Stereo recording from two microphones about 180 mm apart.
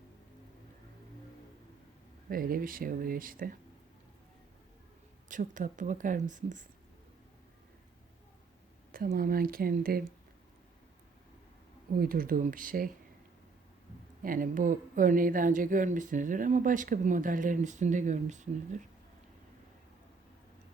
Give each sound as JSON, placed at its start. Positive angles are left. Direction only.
{"t": 2.3, "sound": "speech", "side_deg": -50}
{"t": 5.3, "sound": "speech", "side_deg": -45}
{"t": 8.9, "sound": "speech", "side_deg": -55}
{"t": 11.9, "sound": "speech", "side_deg": -55}
{"t": 14.2, "sound": "speech", "side_deg": -50}